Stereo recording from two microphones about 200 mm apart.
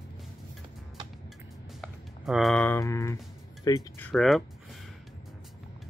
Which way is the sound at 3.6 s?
20° left (ahead or behind).